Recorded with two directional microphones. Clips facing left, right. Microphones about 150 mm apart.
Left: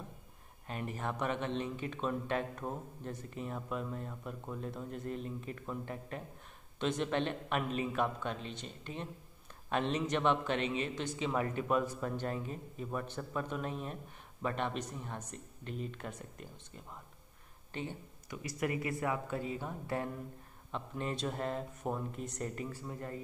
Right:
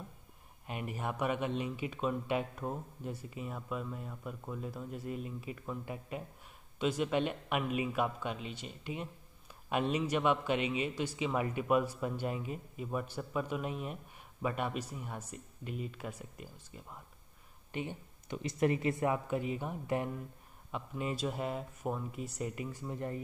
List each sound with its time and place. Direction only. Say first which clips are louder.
0.7 s speech: even; 10° right (ahead or behind)
17.7 s speech: right 2 dB; 20° right (ahead or behind)